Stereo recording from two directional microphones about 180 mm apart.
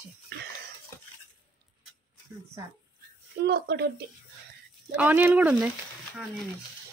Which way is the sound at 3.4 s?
65° right (ahead or behind).